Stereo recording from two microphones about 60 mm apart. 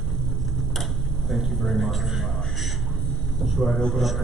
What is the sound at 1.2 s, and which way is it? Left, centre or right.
A man's voice, centre.